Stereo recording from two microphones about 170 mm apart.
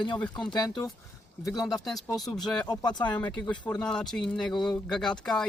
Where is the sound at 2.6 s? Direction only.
25° left (ahead or behind).